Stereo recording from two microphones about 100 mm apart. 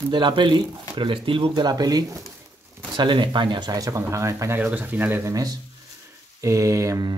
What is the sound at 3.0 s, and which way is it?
Speech, 50° right (ahead or behind).